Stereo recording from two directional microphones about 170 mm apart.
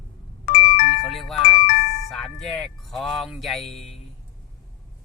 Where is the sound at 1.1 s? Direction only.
Centre (ahead or behind).